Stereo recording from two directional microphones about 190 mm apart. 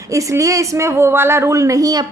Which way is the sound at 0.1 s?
15° right (ahead or behind).